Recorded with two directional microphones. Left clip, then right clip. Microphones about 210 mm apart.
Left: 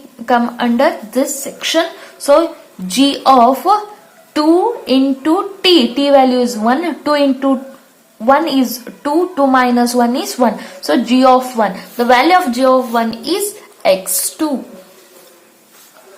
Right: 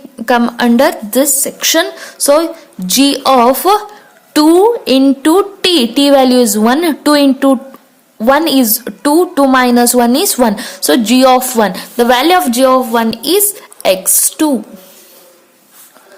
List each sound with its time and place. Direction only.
0.3 s a woman's voice: 55° right (ahead or behind)